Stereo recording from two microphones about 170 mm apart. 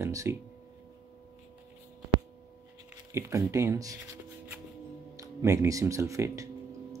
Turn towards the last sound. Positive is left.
turn(degrees=-20)  # may be behind; listen again after turning